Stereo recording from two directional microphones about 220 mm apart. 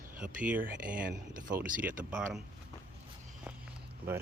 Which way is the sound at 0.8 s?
40° right (ahead or behind).